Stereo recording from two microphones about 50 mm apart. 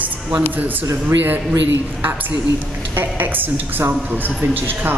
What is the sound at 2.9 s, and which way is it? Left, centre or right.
A woman's voice, right.